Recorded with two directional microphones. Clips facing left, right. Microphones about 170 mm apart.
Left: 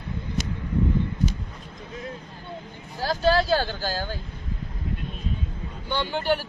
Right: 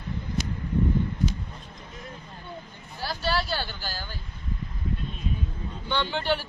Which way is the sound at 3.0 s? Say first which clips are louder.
Left 7 dB; 45° left (ahead or behind).